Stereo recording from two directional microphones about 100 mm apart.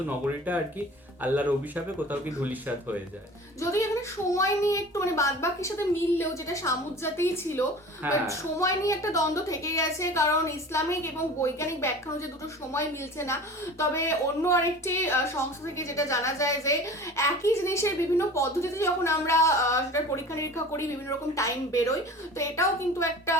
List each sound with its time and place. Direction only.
0.5 s speech: 15° right (ahead or behind)
3.6 s a child's voice: 30° left (ahead or behind)